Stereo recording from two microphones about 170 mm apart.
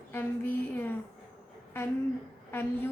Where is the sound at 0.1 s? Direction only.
10° left (ahead or behind).